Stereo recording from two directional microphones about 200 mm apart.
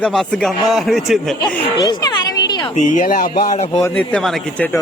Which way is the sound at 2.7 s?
40° left (ahead or behind).